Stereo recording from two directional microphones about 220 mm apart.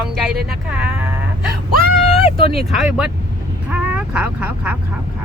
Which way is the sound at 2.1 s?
30° left (ahead or behind).